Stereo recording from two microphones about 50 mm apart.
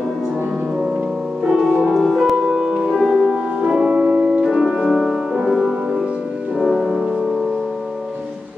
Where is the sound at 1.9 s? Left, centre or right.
Centre.